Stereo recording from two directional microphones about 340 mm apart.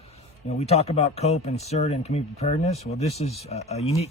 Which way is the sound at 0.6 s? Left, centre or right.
Centre.